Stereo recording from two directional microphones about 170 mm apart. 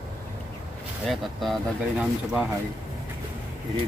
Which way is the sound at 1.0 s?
Centre (ahead or behind).